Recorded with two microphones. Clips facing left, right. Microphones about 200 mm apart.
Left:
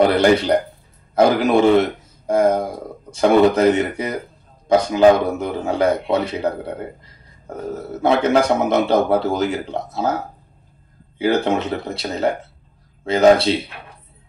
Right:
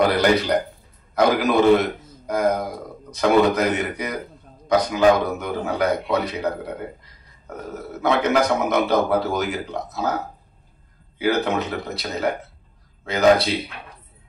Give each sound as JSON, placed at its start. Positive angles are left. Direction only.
{"t": 0.0, "sound": "a man's voice", "side_deg": 30}